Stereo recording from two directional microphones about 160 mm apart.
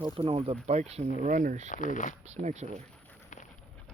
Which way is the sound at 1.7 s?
55° left (ahead or behind).